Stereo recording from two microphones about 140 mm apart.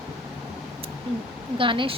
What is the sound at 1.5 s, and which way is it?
Speech, 35° right (ahead or behind).